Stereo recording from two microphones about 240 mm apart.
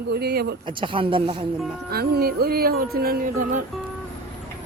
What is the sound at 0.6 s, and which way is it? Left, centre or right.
Speech, right.